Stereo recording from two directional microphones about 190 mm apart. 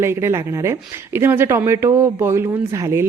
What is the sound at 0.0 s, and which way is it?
Speech, 15° right (ahead or behind).